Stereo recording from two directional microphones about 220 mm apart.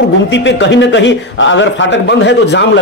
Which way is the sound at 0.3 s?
55° left (ahead or behind).